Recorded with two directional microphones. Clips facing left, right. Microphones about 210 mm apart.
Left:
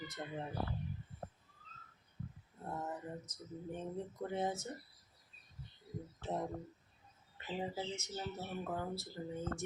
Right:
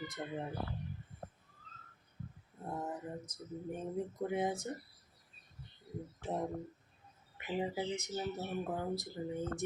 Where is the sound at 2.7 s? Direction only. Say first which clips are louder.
Right 2 dB; 10° right (ahead or behind).